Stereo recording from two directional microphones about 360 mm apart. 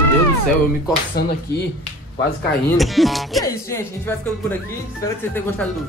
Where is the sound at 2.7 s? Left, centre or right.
Centre.